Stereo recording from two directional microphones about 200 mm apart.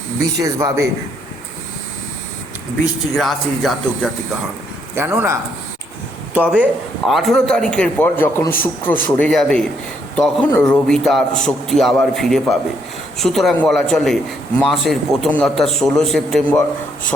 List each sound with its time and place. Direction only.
0.4 s a man's voice: 15° right (ahead or behind)
3.2 s a man's voice: centre (ahead or behind)
4.9 s a man's voice: 10° right (ahead or behind); by 17.1 s 5° left (ahead or behind)